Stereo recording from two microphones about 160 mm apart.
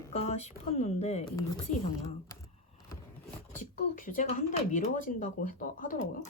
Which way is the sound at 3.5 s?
55° left (ahead or behind).